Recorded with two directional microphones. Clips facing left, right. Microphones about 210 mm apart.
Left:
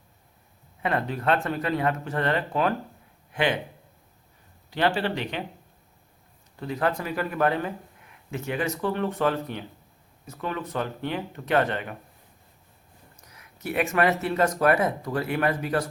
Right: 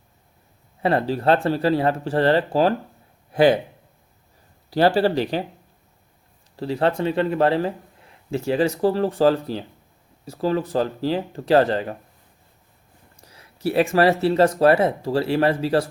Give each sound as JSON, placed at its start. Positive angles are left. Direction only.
{"t": 0.8, "sound": "speech", "side_deg": -35}
{"t": 4.7, "sound": "speech", "side_deg": -35}
{"t": 6.6, "sound": "speech", "side_deg": -30}
{"t": 13.2, "sound": "speech", "side_deg": -30}